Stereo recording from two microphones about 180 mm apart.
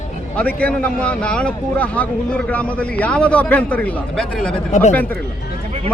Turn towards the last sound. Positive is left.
turn(degrees=40)  # may be behind; listen again after turning